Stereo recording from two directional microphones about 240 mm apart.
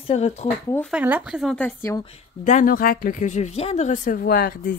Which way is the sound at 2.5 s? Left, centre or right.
Left.